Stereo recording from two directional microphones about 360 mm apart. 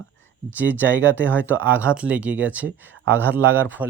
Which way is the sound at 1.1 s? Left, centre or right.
Centre.